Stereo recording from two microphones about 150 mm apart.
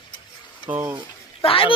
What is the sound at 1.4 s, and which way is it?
Speech, 40° left (ahead or behind).